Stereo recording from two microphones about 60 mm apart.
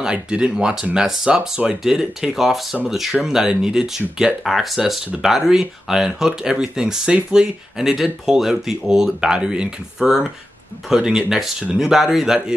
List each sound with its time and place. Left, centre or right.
0.0 s speech: centre